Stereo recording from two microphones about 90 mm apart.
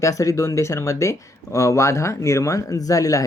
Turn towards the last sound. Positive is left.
turn(degrees=40)  # may be behind; listen again after turning